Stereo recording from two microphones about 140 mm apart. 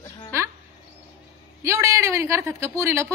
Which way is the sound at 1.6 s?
20° right (ahead or behind).